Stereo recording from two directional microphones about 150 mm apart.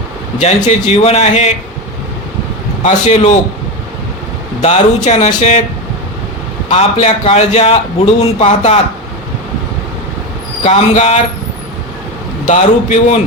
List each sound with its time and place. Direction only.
0.3 s a man's voice: 50° left (ahead or behind)
2.8 s a man's voice: 50° left (ahead or behind)
4.6 s a man's voice: 45° left (ahead or behind)
6.7 s a man's voice: 45° left (ahead or behind)
10.6 s a man's voice: 50° left (ahead or behind)
12.5 s a man's voice: 55° left (ahead or behind)